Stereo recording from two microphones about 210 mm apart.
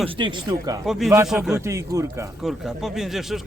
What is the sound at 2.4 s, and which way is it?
Speech, centre (ahead or behind).